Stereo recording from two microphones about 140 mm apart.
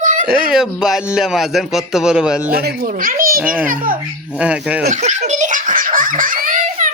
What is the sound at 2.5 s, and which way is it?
Speech, 90° right.